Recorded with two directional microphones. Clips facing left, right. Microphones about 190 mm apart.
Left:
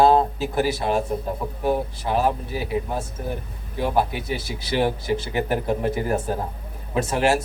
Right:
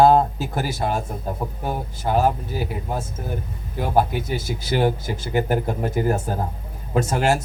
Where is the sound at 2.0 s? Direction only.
45° right (ahead or behind).